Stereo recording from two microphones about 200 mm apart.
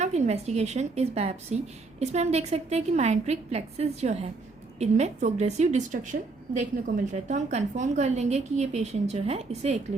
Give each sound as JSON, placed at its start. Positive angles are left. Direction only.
{"t": 0.0, "sound": "a woman's voice", "side_deg": -35}